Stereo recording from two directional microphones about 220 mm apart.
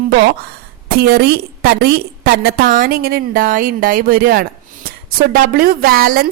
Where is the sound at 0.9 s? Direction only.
45° right (ahead or behind).